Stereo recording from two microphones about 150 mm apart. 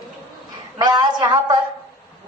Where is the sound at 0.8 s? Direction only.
30° right (ahead or behind).